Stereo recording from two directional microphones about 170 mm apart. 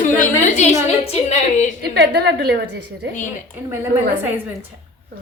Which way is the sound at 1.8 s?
70° right (ahead or behind).